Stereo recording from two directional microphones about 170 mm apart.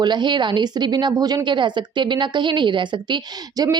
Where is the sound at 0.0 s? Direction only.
25° right (ahead or behind).